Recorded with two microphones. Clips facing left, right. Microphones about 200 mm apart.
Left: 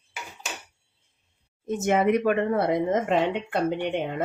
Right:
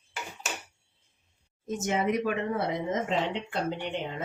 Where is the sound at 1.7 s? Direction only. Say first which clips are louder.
Left 6 dB; 60° left (ahead or behind).